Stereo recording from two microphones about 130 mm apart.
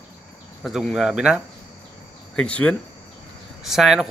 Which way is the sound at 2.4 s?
10° left (ahead or behind).